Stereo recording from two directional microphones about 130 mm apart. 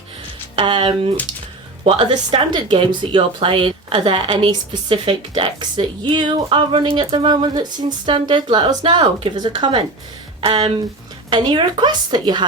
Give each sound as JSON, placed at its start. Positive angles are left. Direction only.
{"t": 0.5, "sound": "speech", "side_deg": -40}